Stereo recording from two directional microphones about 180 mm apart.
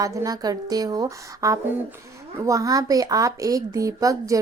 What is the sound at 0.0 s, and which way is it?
A woman's voice, 20° right (ahead or behind).